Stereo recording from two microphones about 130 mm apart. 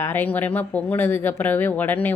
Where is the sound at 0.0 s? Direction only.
15° left (ahead or behind).